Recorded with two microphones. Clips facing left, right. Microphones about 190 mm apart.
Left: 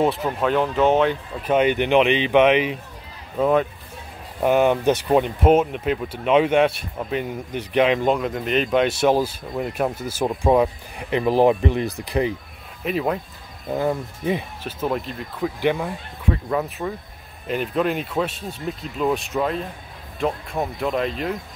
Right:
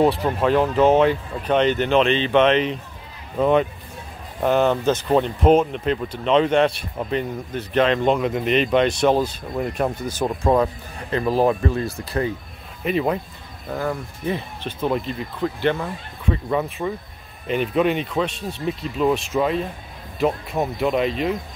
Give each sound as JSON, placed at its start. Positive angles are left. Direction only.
{"t": 0.0, "sound": "speech", "side_deg": 0}
{"t": 12.8, "sound": "speech", "side_deg": 0}
{"t": 13.7, "sound": "speech", "side_deg": 20}
{"t": 14.6, "sound": "speech", "side_deg": 5}
{"t": 16.4, "sound": "speech", "side_deg": 0}